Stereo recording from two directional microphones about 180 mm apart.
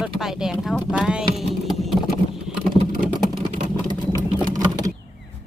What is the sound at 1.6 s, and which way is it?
Vehicle, centre (ahead or behind).